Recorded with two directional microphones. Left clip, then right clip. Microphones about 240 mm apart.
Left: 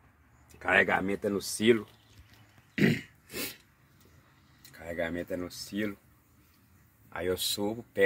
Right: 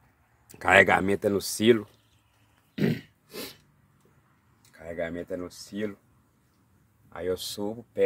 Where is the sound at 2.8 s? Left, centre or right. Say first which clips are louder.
Left 2 dB; centre.